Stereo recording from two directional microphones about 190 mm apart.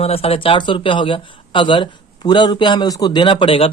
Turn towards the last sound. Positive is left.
turn(degrees=30)  # may be behind; listen again after turning